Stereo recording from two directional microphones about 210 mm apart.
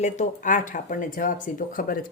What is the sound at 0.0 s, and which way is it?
Speech, 35° left (ahead or behind).